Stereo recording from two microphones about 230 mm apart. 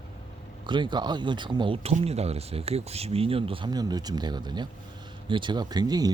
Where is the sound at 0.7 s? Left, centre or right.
Centre.